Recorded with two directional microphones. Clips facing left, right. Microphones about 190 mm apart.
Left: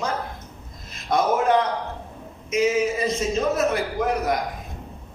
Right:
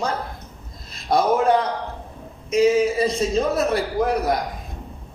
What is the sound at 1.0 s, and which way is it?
A man's voice, 35° right (ahead or behind).